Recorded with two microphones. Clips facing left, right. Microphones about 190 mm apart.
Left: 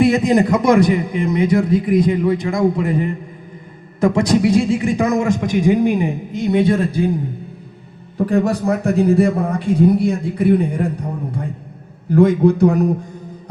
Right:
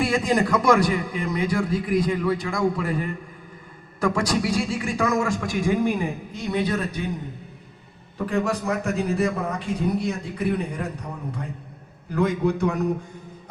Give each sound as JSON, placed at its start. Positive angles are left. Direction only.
{"t": 0.0, "sound": "a man's voice", "side_deg": 20}
{"t": 8.2, "sound": "a man's voice", "side_deg": 35}